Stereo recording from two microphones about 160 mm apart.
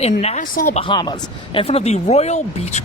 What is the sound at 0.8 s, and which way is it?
Speech, 30° left (ahead or behind).